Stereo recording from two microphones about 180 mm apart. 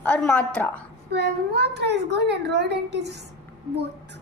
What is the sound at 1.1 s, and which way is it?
A child's voice, 70° right (ahead or behind).